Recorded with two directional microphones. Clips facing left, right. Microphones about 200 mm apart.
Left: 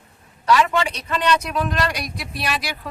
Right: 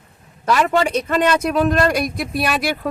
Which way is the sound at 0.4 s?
40° right (ahead or behind).